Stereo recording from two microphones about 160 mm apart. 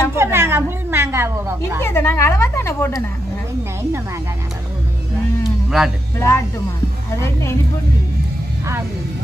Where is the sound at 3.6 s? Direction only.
15° right (ahead or behind).